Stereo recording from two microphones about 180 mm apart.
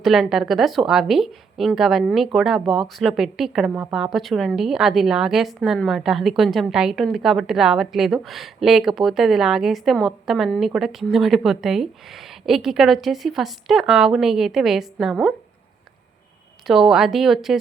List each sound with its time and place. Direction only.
0.0 s a woman's voice: centre (ahead or behind)
16.6 s a woman's voice: centre (ahead or behind)